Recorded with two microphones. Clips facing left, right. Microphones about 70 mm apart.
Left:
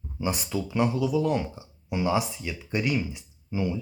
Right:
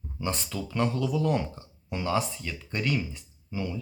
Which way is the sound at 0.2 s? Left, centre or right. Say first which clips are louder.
Left 3 dB; centre.